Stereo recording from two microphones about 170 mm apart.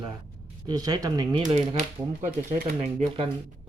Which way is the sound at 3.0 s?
30° right (ahead or behind).